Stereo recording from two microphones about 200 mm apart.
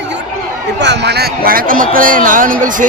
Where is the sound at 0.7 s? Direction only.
60° right (ahead or behind).